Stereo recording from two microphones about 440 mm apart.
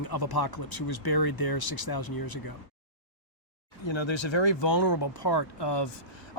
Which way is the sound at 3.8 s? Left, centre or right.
Left.